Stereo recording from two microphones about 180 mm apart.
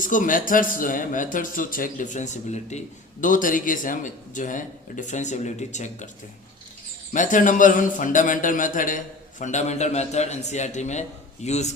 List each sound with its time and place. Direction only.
0.0 s speech: 45° left (ahead or behind)
7.1 s a man's voice: 45° left (ahead or behind)